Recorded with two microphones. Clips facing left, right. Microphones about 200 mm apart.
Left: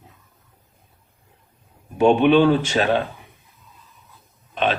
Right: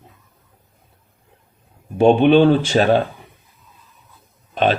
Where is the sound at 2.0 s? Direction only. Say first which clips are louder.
Right 3 dB; 30° right (ahead or behind).